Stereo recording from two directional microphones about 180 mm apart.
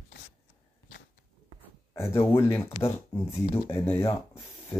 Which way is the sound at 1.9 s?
15° left (ahead or behind).